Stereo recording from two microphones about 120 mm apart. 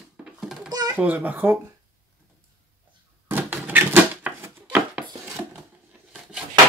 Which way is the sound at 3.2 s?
15° right (ahead or behind).